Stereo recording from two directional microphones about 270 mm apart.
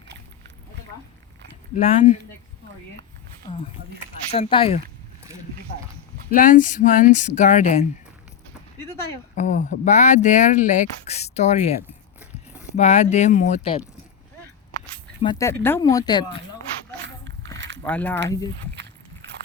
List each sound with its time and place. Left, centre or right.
1.7 s speech: left
4.3 s speech: left
6.3 s speech: left
9.3 s speech: left
15.2 s speech: centre
17.8 s speech: centre
18.8 s a sound: right